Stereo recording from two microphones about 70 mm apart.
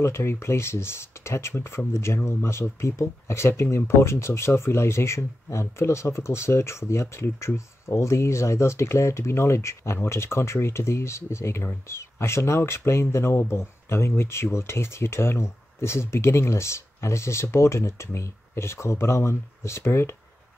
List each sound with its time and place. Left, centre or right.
0.0 s speech: left